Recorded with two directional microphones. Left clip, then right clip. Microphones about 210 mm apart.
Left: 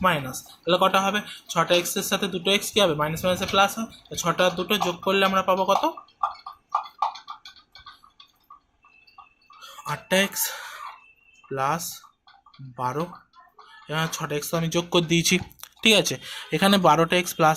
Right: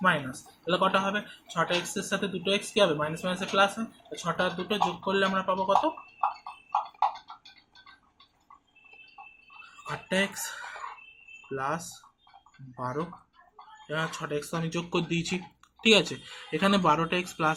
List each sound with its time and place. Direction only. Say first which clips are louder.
0.0 s speech: left 3 dB; 40° left (ahead or behind)
9.8 s speech: left 6 dB; 45° left (ahead or behind)